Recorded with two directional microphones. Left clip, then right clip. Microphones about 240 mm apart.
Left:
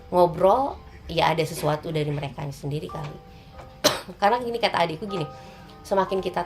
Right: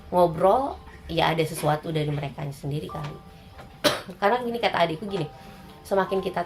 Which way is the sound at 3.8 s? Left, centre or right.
Left.